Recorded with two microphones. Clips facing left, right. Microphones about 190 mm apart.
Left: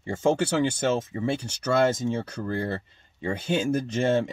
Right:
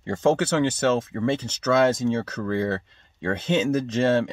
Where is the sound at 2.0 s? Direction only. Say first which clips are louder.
Right 4 dB; 75° right (ahead or behind).